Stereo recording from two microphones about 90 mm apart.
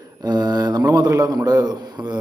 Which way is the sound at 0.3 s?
45° right (ahead or behind).